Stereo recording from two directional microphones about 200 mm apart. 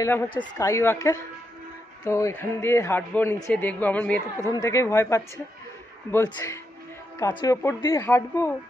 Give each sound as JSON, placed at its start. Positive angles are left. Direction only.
{"t": 0.3, "sound": "speech", "side_deg": 20}